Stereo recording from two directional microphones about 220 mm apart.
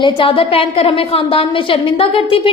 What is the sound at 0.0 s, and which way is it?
A woman's voice, 25° left (ahead or behind).